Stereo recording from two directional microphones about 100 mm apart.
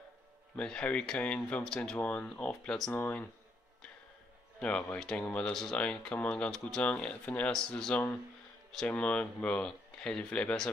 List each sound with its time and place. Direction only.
0.6 s speech: 10° left (ahead or behind)
2.9 s speech: 20° left (ahead or behind)
4.6 s speech: 10° left (ahead or behind)